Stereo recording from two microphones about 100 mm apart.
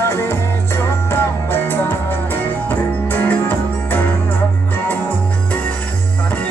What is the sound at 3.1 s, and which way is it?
Music, 20° left (ahead or behind).